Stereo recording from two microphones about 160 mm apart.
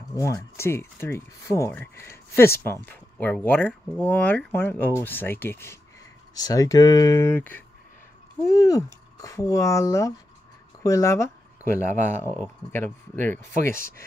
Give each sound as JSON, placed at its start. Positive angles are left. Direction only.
{"t": 0.1, "sound": "speech", "side_deg": 20}
{"t": 10.8, "sound": "a sound", "side_deg": 20}
{"t": 12.2, "sound": "speech", "side_deg": 15}